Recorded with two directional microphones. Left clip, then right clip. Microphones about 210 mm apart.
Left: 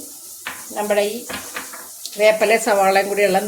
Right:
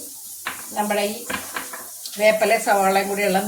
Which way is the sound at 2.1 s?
40° left (ahead or behind).